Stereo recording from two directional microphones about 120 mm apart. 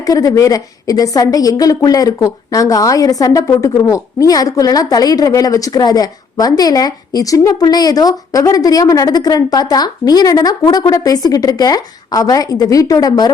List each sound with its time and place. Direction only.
0.0 s a woman's voice: 30° left (ahead or behind)